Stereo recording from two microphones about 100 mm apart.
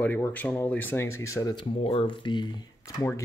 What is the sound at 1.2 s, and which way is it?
Speech, 30° left (ahead or behind).